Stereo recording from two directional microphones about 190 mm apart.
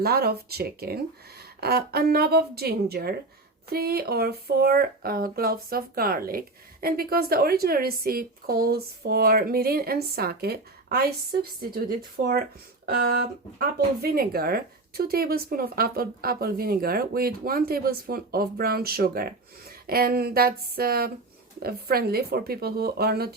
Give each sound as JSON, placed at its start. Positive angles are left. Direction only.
{"t": 0.0, "sound": "a woman's voice", "side_deg": -55}